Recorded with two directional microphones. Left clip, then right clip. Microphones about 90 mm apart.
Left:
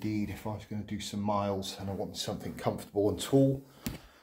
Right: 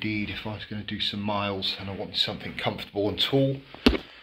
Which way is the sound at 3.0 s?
90° left.